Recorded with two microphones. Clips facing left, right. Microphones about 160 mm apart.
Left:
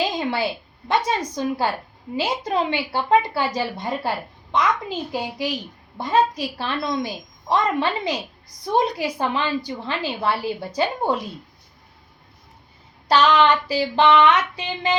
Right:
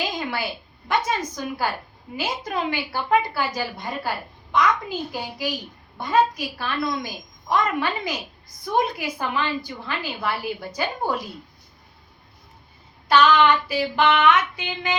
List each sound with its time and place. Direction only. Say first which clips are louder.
0.0 s a sound: left 4 dB; 25° left (ahead or behind)
0.9 s a woman's voice: left 2 dB; 30° left (ahead or behind)
13.1 s child singing: even; 30° left (ahead or behind)